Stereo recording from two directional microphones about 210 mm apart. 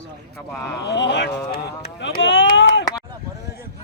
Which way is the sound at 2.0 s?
55° left (ahead or behind).